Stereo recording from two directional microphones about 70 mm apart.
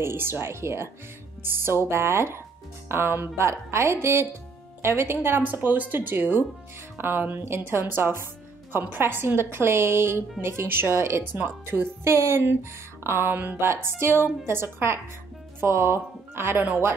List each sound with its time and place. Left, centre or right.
0.0 s a woman's voice: right